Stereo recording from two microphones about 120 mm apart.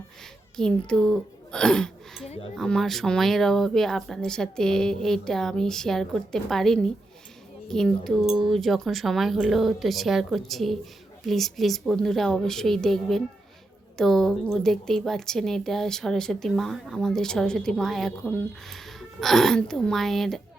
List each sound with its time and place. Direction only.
0.5 s speech: 5° left (ahead or behind)
2.2 s speech: 60° left (ahead or behind)
2.6 s a woman's voice: 5° left (ahead or behind)